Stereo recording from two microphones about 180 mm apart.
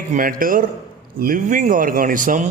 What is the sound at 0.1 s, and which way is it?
A man's voice, 50° right (ahead or behind).